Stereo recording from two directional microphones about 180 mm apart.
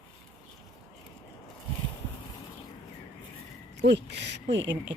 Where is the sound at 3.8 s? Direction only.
70° right (ahead or behind).